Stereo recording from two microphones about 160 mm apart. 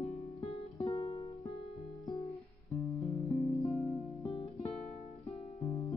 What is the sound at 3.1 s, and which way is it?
Music, 20° left (ahead or behind).